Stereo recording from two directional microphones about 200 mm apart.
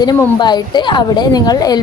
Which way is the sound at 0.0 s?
20° left (ahead or behind).